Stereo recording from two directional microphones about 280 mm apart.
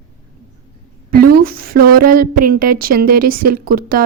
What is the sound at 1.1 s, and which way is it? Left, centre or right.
Speech, right.